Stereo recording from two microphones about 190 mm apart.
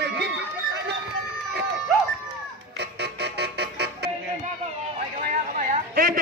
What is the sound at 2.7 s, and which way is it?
Music, 60° right (ahead or behind).